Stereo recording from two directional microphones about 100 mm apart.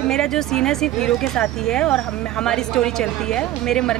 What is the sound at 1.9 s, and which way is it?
Speech, 5° left (ahead or behind).